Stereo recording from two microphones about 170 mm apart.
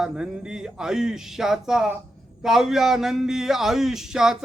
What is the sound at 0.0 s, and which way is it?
Speech, 5° right (ahead or behind).